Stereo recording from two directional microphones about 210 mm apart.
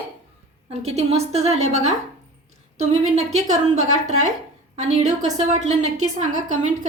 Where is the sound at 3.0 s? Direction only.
35° right (ahead or behind).